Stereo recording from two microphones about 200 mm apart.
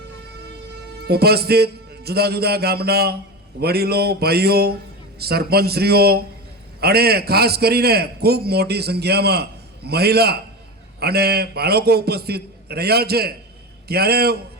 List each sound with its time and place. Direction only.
1.0 s a man's voice: 50° right (ahead or behind)